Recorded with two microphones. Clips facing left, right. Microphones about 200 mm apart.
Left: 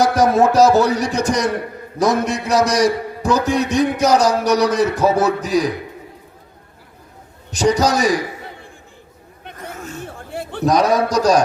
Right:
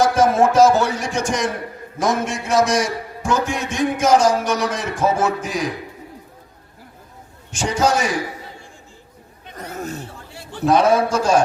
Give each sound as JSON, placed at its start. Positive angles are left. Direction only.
{"t": 0.0, "sound": "a man's voice", "side_deg": 35}
{"t": 7.5, "sound": "a man's voice", "side_deg": 35}
{"t": 9.6, "sound": "a sound", "side_deg": -40}
{"t": 10.7, "sound": "a man's voice", "side_deg": 40}